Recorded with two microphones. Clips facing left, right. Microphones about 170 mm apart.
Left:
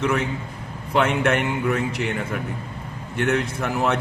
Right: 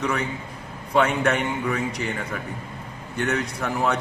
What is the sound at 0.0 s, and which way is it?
A man's voice, 5° left (ahead or behind).